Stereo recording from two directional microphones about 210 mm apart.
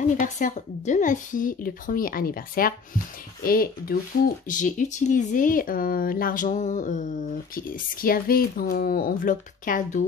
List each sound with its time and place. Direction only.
0.0 s speech: 35° left (ahead or behind)